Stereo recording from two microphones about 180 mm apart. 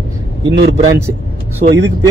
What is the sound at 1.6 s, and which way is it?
Speech, 75° right (ahead or behind).